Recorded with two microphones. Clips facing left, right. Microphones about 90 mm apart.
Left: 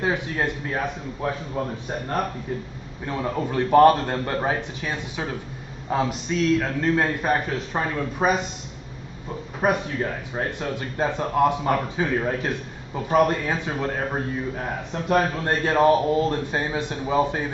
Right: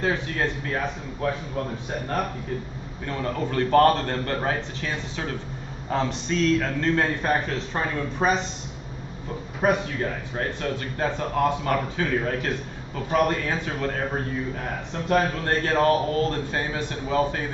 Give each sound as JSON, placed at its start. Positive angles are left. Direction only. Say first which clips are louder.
{"t": 0.0, "sound": "speech", "louder": "left 1 dB", "side_deg": 15}
{"t": 3.1, "sound": "speech", "louder": "left 2 dB", "side_deg": 15}
{"t": 9.6, "sound": "speech", "louder": "even", "side_deg": 5}
{"t": 15.1, "sound": "speech", "louder": "left 1 dB", "side_deg": 15}